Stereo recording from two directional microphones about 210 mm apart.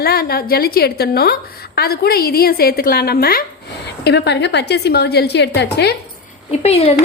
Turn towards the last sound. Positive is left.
turn(degrees=30)  # may be behind; listen again after turning